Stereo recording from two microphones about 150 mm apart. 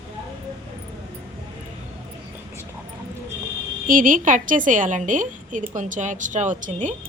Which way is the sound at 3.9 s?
65° right (ahead or behind).